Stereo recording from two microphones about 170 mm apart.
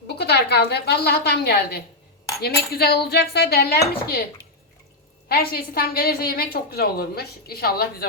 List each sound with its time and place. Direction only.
0.2 s dishes: 75° left (ahead or behind)
5.3 s a woman's voice: 65° left (ahead or behind)